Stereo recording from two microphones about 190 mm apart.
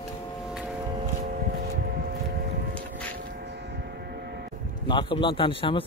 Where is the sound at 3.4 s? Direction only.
60° right (ahead or behind).